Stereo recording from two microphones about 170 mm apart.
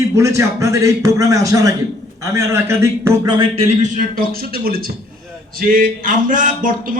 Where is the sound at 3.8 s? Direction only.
50° right (ahead or behind).